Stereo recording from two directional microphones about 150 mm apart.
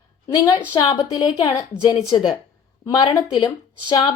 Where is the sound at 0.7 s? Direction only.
25° left (ahead or behind).